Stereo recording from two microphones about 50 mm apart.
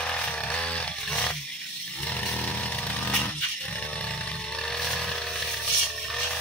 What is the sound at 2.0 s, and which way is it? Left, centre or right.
Chainsaw, left.